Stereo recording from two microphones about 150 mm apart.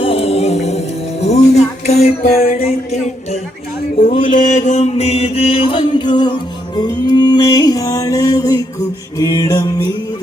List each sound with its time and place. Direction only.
0.0 s a capella: 40° left (ahead or behind)
1.2 s music: 50° left (ahead or behind)
2.4 s music: 65° left (ahead or behind)
2.6 s music: 45° left (ahead or behind)
4.2 s mantra: 60° left (ahead or behind); by 6.3 s 30° left (ahead or behind)
6.7 s music: 25° left (ahead or behind)